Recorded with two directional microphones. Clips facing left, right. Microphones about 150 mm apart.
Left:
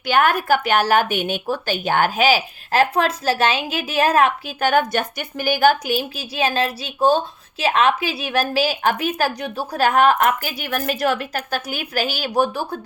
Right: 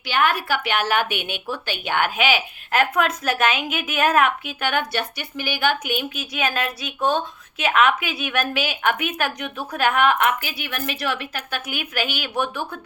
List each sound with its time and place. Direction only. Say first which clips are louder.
0.0 s a woman's voice: left 4 dB; 45° left (ahead or behind)